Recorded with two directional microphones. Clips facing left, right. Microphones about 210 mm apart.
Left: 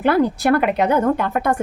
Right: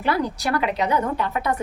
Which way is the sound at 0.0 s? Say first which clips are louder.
Left 7 dB; 55° left (ahead or behind).